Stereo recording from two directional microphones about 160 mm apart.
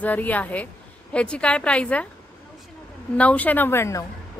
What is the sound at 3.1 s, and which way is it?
Speech, 10° left (ahead or behind).